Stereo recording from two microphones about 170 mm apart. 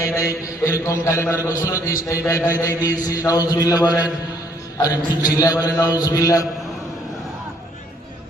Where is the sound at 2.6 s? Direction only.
20° left (ahead or behind).